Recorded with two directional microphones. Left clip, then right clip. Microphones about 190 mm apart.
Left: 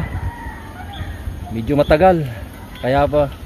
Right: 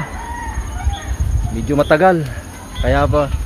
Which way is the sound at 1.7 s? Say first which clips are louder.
Even; 25° left (ahead or behind).